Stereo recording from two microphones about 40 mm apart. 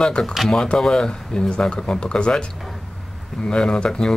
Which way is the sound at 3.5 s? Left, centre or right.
Left.